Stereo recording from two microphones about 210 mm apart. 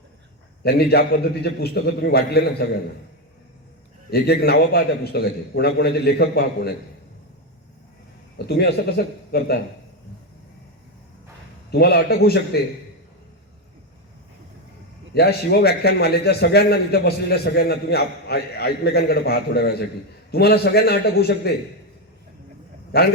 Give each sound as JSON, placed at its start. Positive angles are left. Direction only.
{"t": 0.6, "sound": "a man's voice", "side_deg": 50}
{"t": 4.1, "sound": "a man's voice", "side_deg": 50}
{"t": 8.4, "sound": "a man's voice", "side_deg": 50}
{"t": 11.7, "sound": "a man's voice", "side_deg": 50}
{"t": 15.1, "sound": "a man's voice", "side_deg": 50}
{"t": 22.9, "sound": "a man's voice", "side_deg": 50}